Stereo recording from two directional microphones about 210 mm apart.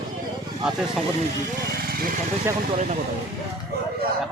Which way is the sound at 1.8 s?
45° right (ahead or behind).